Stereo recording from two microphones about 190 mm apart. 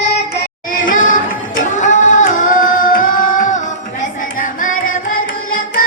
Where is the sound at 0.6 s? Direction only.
45° left (ahead or behind).